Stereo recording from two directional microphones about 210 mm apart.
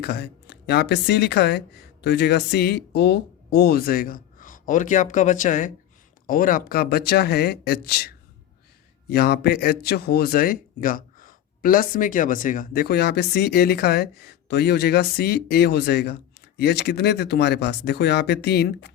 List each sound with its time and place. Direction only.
0.0 s speech: 50° left (ahead or behind)